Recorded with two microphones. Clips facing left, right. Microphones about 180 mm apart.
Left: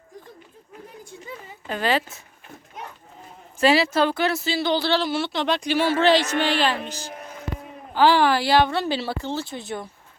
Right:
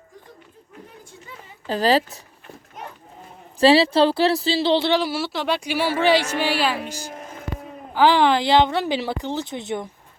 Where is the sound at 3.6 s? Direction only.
30° right (ahead or behind).